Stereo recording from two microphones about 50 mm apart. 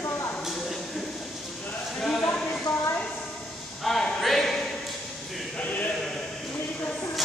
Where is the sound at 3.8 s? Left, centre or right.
Centre.